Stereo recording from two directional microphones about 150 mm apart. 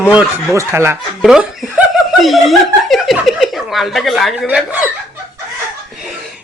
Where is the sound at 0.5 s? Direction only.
20° right (ahead or behind).